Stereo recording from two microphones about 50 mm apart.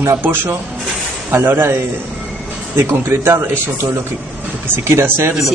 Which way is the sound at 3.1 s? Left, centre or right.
Right.